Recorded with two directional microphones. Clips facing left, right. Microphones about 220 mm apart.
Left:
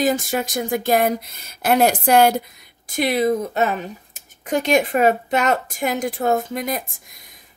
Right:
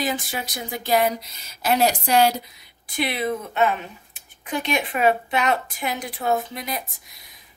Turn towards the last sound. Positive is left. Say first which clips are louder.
# left 4 dB
turn(degrees=45)  # may be behind; listen again after turning